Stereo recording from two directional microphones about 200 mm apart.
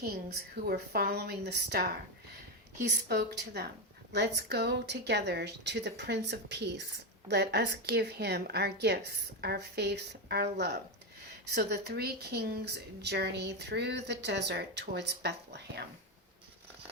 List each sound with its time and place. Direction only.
0.7 s a woman's voice: 50° right (ahead or behind)
3.1 s a woman's voice: 55° right (ahead or behind)